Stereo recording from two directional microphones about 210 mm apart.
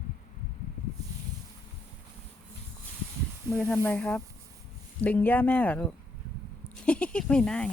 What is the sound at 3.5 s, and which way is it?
Speech, 5° left (ahead or behind).